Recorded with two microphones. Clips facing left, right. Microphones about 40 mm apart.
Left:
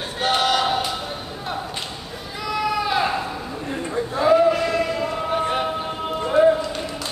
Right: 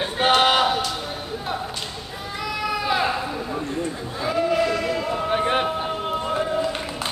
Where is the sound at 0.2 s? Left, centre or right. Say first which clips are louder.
Right 2 dB; right.